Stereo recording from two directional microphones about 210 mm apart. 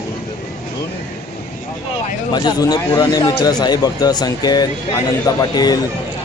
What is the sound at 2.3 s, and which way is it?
Speech, 20° left (ahead or behind).